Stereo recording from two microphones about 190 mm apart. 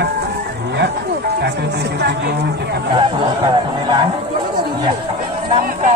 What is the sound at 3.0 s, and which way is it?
Speech, 25° right (ahead or behind).